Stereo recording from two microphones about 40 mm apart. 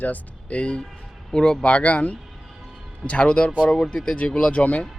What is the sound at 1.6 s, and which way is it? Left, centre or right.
Speech, left.